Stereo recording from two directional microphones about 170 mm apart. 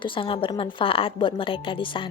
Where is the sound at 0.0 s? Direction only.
30° left (ahead or behind).